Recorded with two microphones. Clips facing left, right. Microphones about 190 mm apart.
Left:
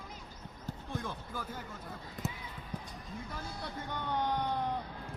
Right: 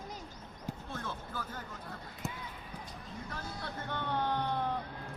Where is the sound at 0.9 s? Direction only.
15° left (ahead or behind).